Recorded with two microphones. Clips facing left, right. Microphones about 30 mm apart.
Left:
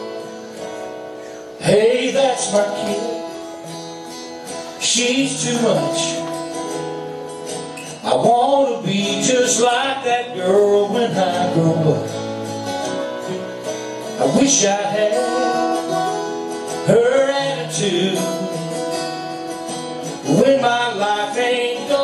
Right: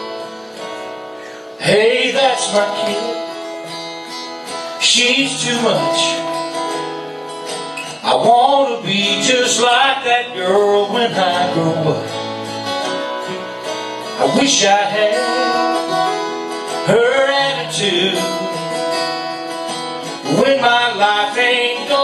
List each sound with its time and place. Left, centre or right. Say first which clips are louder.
1.6 s music: right 2 dB; right
4.8 s speech: right 4 dB; right
8.0 s music: right 3 dB; right
20.2 s music: right 1 dB; right